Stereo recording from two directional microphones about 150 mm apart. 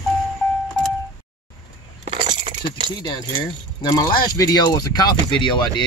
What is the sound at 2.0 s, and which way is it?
Coin, 35° right (ahead or behind).